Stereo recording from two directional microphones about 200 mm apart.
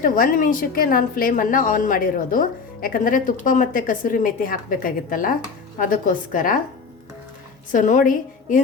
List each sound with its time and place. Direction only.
0.0 s speech: 40° left (ahead or behind)
7.7 s a woman's voice: 40° left (ahead or behind)